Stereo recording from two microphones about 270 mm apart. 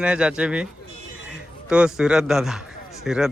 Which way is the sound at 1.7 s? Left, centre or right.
Centre.